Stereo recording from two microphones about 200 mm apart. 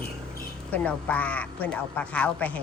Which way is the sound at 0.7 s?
10° left (ahead or behind).